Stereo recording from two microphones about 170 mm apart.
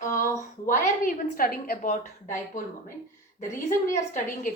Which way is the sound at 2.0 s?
45° left (ahead or behind).